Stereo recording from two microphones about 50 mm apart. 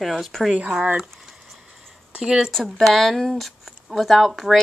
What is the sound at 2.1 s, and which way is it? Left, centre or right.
Speech, centre.